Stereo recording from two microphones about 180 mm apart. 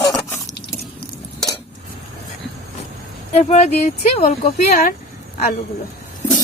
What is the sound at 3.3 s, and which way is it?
Speech, 40° left (ahead or behind).